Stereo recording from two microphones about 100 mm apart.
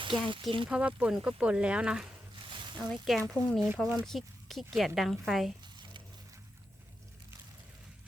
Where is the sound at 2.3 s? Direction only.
50° right (ahead or behind).